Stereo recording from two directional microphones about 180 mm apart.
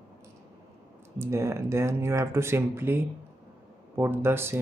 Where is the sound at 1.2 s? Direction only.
15° right (ahead or behind).